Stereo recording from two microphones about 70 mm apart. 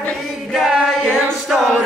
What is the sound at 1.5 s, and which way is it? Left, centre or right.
Speech, centre.